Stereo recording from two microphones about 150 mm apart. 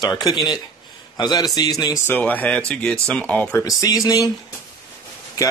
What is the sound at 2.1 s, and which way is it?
Speech, 10° left (ahead or behind).